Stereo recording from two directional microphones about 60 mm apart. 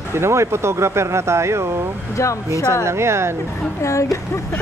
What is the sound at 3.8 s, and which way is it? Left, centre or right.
Speech, left.